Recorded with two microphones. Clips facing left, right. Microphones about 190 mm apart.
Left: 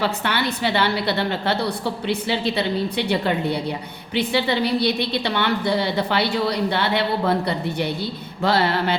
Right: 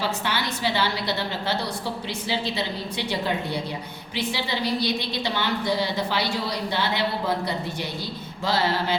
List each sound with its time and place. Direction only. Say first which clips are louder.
0.0 s a woman's voice: left 4 dB; 60° left (ahead or behind)